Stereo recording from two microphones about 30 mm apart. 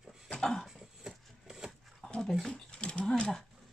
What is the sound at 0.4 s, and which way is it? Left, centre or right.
Speech, left.